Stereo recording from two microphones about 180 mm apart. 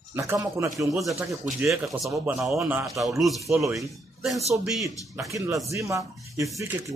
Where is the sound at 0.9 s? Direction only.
Centre (ahead or behind).